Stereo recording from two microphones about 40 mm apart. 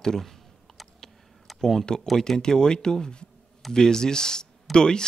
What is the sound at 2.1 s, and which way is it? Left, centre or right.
Speech, centre.